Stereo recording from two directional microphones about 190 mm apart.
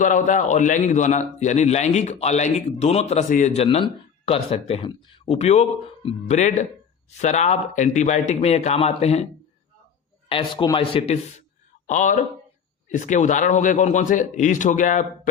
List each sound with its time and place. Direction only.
0.0 s a man's voice: 40° left (ahead or behind)
10.2 s a man's voice: 25° left (ahead or behind)